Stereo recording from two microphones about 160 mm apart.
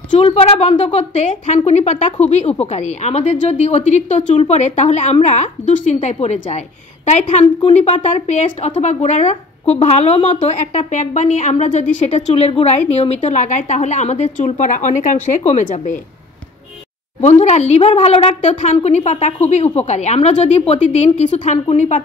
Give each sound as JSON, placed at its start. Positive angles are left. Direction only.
{"t": 0.1, "sound": "a woman's voice", "side_deg": 40}
{"t": 17.2, "sound": "a woman's voice", "side_deg": 45}